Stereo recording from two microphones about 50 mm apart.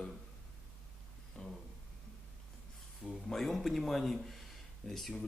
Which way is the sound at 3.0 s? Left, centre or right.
Centre.